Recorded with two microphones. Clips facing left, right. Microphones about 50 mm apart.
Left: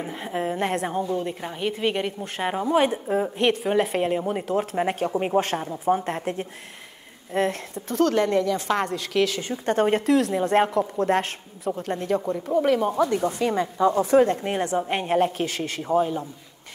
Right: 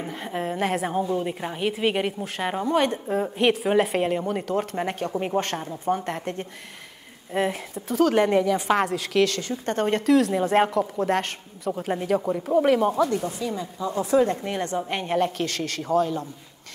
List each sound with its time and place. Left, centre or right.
0.0 s a woman's voice: centre
7.3 s a woman's voice: centre
8.1 s speech: centre
8.7 s a woman's voice: centre
9.4 s a woman's voice: centre
13.4 s speech: left
13.9 s speech: left
14.6 s a man's voice: centre